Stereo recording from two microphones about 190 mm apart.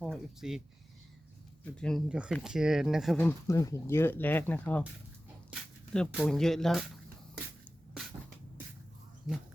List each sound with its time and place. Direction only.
0.0 s speech: centre (ahead or behind)
1.6 s speech: 5° left (ahead or behind)
3.2 s speech: 15° left (ahead or behind)
9.3 s speech: 5° right (ahead or behind)